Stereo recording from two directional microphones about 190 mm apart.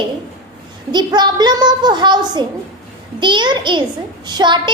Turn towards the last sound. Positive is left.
turn(degrees=-25)  # may be behind; listen again after turning